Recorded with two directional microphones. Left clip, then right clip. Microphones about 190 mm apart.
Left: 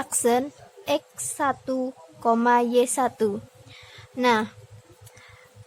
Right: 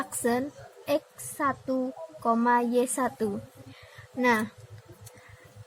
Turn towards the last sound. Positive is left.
turn(degrees=35)  # may be behind; listen again after turning